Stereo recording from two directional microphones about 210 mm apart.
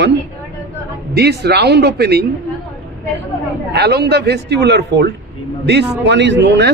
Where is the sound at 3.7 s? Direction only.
50° right (ahead or behind).